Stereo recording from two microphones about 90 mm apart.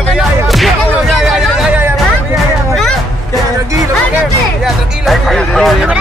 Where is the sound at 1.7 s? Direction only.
25° right (ahead or behind).